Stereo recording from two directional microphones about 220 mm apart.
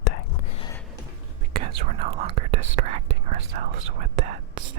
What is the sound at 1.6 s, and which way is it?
Whispering, 45° right (ahead or behind).